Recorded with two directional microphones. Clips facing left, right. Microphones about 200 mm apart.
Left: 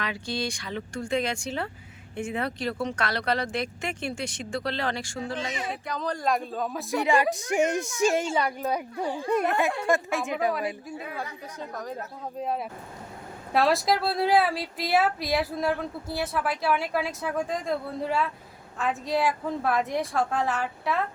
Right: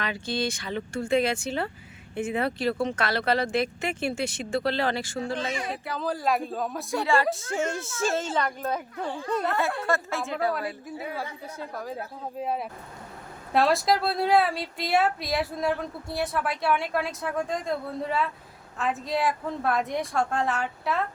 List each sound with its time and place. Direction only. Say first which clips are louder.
0.0 s a woman's voice: right 2 dB; centre (ahead or behind)
6.9 s speech: left 1 dB; 20° left (ahead or behind)
10.8 s a woman's voice: right 1 dB; 5° right (ahead or behind)